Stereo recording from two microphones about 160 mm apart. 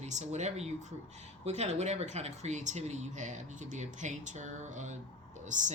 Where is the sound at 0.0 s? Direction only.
45° right (ahead or behind).